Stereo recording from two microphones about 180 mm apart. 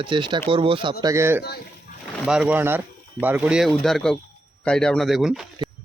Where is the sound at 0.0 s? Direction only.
25° right (ahead or behind).